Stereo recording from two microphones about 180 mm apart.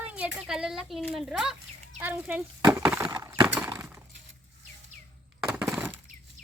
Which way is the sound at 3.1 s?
20° right (ahead or behind).